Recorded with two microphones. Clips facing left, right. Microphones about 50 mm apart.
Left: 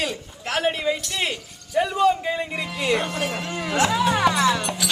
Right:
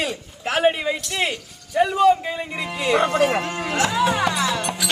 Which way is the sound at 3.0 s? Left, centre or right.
Right.